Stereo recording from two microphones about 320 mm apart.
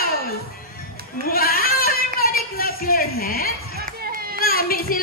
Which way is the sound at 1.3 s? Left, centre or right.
Left.